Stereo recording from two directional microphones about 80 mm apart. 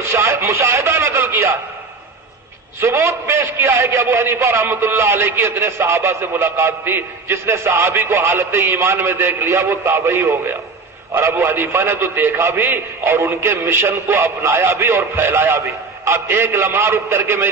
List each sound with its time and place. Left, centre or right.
0.1 s speech: right
2.8 s a man's voice: right